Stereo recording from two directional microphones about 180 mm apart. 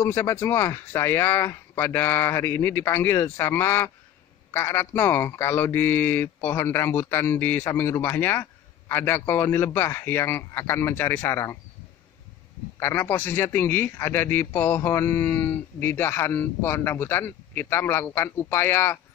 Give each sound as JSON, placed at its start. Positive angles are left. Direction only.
{"t": 0.0, "sound": "speech", "side_deg": 10}
{"t": 12.7, "sound": "speech", "side_deg": 15}